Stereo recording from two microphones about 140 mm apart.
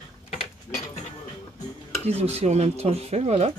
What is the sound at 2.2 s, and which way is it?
Speech, 50° right (ahead or behind).